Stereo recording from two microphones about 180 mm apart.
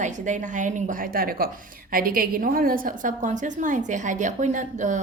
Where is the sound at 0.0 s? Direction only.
45° right (ahead or behind).